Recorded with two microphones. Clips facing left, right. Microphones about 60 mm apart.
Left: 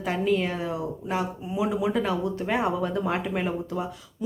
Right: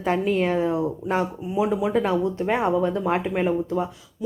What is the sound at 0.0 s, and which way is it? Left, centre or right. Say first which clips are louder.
Speech: right 3 dB; right.